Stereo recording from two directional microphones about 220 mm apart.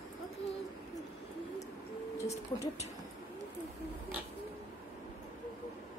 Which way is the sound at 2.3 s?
30° left (ahead or behind).